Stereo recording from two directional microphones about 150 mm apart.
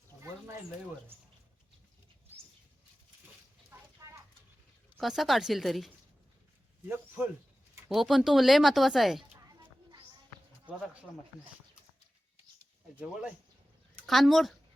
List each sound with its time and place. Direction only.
3.7 s clip-clop: 20° right (ahead or behind)
4.9 s speech: centre (ahead or behind)
6.8 s speech: 15° right (ahead or behind)
7.9 s speech: centre (ahead or behind)
14.1 s speech: centre (ahead or behind)